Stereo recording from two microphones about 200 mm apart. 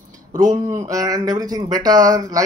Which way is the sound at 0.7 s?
15° right (ahead or behind).